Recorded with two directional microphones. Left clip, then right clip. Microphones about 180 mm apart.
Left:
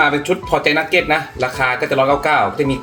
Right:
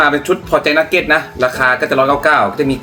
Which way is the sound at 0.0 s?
15° right (ahead or behind).